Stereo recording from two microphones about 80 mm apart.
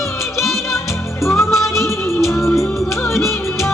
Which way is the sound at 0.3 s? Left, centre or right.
Centre.